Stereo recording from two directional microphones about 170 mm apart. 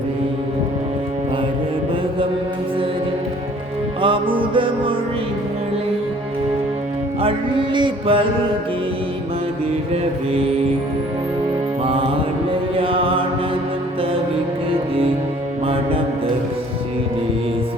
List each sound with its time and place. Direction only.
4.0 s music: 30° right (ahead or behind)
7.2 s mantra: 30° right (ahead or behind)
12.7 s mantra: 30° right (ahead or behind)
15.6 s music: 35° right (ahead or behind)